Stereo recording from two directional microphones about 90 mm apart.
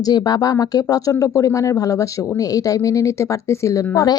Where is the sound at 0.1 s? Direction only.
50° left (ahead or behind).